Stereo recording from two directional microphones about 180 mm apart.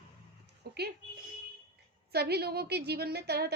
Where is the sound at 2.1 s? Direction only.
65° right (ahead or behind).